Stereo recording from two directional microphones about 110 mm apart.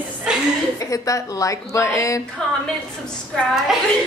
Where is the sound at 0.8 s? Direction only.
30° left (ahead or behind).